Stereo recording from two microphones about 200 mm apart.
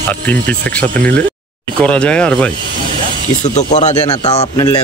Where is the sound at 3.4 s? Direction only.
35° left (ahead or behind).